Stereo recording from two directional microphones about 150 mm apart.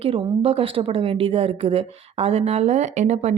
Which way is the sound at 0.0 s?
40° right (ahead or behind).